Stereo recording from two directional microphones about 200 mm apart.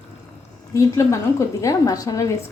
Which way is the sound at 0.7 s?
15° left (ahead or behind).